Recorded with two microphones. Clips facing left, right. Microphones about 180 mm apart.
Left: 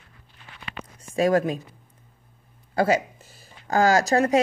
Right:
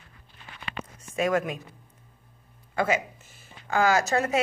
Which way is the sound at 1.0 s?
35° left (ahead or behind).